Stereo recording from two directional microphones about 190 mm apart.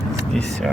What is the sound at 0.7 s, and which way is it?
Music, centre (ahead or behind).